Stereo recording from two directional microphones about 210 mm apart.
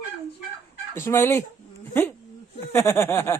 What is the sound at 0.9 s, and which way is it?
Speech, 10° left (ahead or behind).